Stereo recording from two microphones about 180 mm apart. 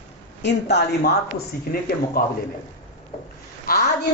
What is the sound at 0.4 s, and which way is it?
Speech, 70° left (ahead or behind).